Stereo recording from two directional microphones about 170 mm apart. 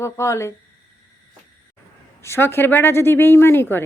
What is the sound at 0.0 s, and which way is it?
Speech, 15° left (ahead or behind).